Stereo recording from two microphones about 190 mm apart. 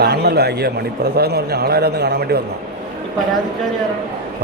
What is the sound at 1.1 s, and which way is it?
A man's voice, 60° right (ahead or behind).